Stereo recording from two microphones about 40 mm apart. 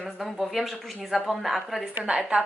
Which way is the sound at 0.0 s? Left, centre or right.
Centre.